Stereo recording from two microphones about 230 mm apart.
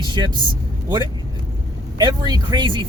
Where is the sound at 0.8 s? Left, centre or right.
Centre.